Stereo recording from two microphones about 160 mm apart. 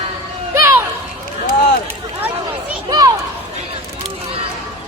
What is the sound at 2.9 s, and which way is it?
Children playing, 25° right (ahead or behind).